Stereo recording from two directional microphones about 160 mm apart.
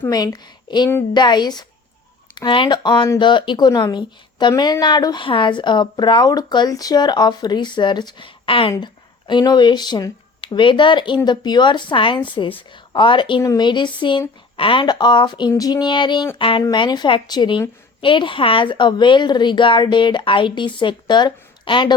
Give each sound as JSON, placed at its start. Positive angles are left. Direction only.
{"t": 0.0, "sound": "a woman's voice", "side_deg": 20}